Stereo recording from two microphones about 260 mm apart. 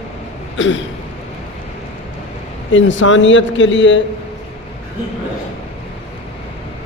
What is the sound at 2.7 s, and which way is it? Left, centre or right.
A man's voice, left.